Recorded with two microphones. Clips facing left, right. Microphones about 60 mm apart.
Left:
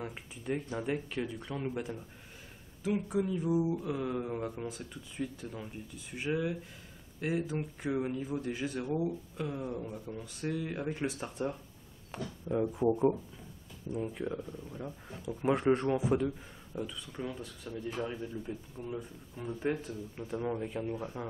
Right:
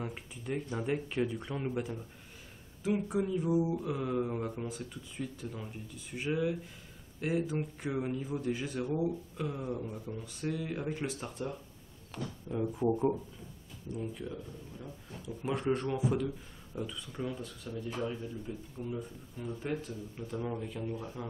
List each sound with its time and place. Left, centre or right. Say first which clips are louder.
0.0 s speech: even; centre
10.1 s speech: left 1 dB; centre
13.9 s speech: left 4 dB; left
16.7 s speech: even; centre
18.5 s speech: even; left